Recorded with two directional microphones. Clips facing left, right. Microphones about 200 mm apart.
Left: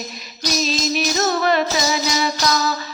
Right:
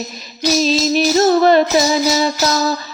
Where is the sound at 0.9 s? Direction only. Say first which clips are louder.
Right 9 dB; 35° right (ahead or behind).